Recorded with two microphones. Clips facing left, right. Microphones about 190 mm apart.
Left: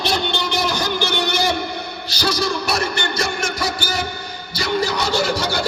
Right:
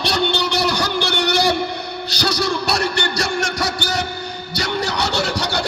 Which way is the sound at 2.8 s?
75° right (ahead or behind).